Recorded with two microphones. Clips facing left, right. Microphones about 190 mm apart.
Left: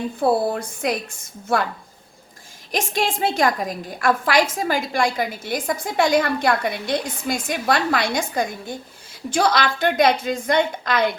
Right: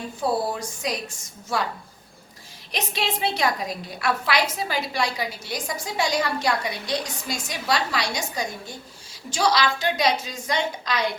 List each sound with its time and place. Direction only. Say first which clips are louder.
0.2 s a woman's voice: left 5 dB; 55° left (ahead or behind)
2.7 s a woman's voice: left 5 dB; 45° left (ahead or behind)